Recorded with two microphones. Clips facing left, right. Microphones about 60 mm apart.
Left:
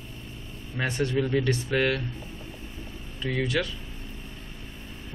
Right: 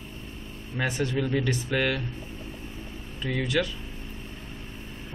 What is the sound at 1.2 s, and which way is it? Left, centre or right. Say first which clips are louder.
Speech: left 3 dB; centre.